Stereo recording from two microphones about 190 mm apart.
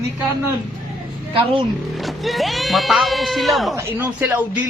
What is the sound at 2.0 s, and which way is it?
Speech, centre (ahead or behind).